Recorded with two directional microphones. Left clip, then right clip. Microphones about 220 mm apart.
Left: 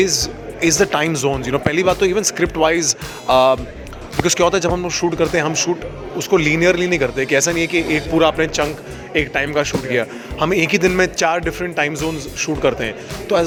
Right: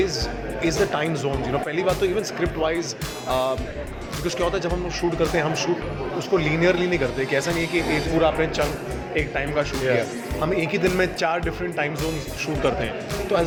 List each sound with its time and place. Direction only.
0.0 s speech: 45° left (ahead or behind)